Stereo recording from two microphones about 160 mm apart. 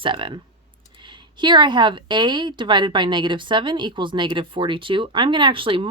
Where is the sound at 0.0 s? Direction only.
30° right (ahead or behind).